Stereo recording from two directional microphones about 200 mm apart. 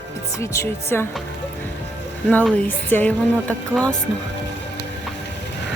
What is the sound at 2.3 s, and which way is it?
Speech, 5° left (ahead or behind).